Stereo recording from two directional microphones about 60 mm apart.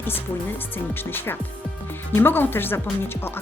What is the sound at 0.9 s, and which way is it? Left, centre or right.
Speech, left.